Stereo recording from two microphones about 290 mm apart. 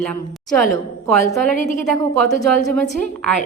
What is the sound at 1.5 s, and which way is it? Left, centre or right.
Speech, left.